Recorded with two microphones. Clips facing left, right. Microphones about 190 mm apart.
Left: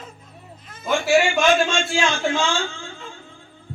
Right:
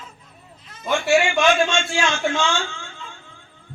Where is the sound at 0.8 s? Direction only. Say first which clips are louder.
Even; centre (ahead or behind).